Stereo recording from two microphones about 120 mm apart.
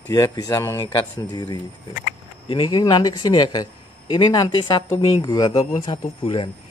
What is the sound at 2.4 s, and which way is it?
Speech, 50° left (ahead or behind).